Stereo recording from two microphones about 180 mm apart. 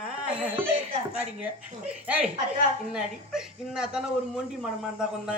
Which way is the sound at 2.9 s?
5° right (ahead or behind).